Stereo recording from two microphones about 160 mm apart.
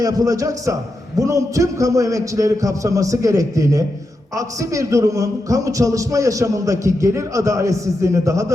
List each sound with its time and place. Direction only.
0.0 s a man's voice: 20° right (ahead or behind)